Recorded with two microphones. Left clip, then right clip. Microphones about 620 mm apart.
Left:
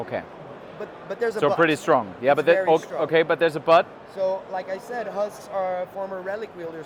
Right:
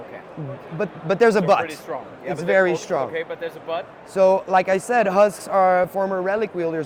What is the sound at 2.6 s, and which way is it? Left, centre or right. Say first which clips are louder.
Speech: even; right.